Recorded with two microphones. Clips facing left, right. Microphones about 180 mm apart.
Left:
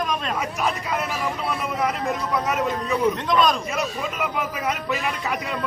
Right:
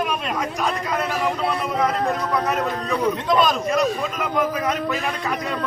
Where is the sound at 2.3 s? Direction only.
5° left (ahead or behind).